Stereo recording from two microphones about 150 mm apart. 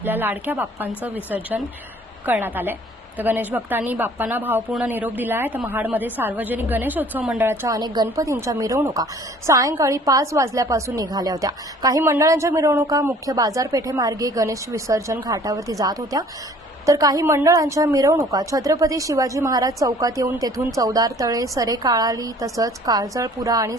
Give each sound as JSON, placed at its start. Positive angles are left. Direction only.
{"t": 0.0, "sound": "speech", "side_deg": -10}
{"t": 7.8, "sound": "a woman's voice", "side_deg": -30}